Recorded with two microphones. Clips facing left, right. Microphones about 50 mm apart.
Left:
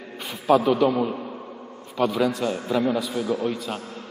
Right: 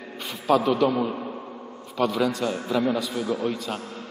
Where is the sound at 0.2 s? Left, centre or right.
Centre.